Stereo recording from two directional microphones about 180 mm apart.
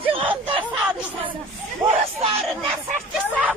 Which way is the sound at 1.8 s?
10° right (ahead or behind).